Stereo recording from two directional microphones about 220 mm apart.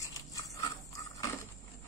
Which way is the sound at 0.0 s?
15° left (ahead or behind).